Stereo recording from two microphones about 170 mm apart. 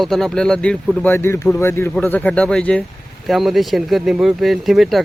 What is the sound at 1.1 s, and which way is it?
Speech, 15° left (ahead or behind).